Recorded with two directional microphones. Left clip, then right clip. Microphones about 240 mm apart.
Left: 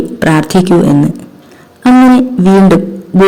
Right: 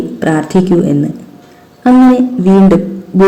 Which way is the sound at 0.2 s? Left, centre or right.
Left.